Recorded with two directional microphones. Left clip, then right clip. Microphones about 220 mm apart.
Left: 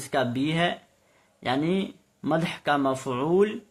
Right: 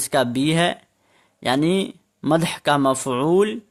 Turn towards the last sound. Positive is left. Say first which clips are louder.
# right 5 dB
turn(degrees=-50)  # may be behind; listen again after turning